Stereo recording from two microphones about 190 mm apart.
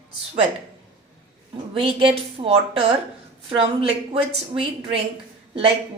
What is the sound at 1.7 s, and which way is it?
A woman's voice, 30° right (ahead or behind).